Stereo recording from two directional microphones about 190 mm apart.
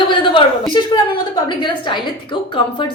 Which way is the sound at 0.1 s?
25° left (ahead or behind).